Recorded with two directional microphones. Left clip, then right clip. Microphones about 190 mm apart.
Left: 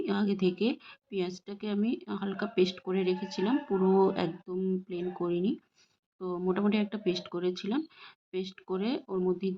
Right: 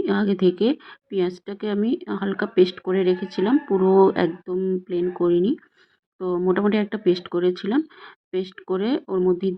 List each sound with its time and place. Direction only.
0.0 s a woman's voice: 20° right (ahead or behind)